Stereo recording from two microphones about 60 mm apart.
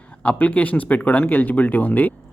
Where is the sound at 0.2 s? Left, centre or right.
Left.